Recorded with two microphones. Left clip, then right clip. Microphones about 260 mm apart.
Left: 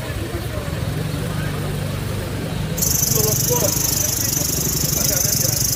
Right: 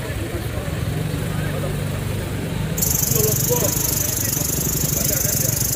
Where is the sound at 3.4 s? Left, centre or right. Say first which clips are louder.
Left 2 dB; left.